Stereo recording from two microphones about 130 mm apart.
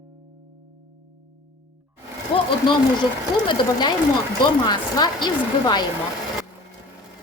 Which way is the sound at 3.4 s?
35° left (ahead or behind).